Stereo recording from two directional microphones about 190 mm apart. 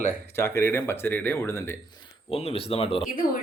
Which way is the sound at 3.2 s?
50° left (ahead or behind).